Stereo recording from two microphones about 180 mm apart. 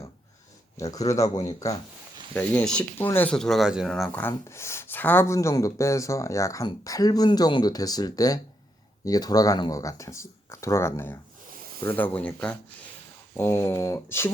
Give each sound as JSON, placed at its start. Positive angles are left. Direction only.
{"t": 0.8, "sound": "speech", "side_deg": 20}
{"t": 2.3, "sound": "speech", "side_deg": 5}
{"t": 4.2, "sound": "speech", "side_deg": 15}